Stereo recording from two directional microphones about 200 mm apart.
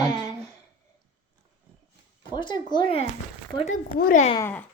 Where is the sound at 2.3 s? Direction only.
20° left (ahead or behind).